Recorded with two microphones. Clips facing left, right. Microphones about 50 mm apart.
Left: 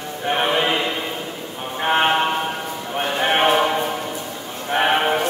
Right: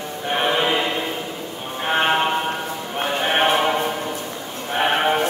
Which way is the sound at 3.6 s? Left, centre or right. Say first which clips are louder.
Even; centre.